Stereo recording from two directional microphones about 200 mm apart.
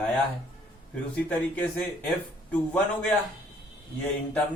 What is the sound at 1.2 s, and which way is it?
Speech, 5° left (ahead or behind).